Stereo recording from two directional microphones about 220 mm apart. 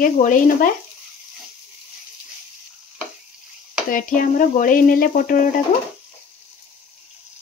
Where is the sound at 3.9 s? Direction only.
40° left (ahead or behind).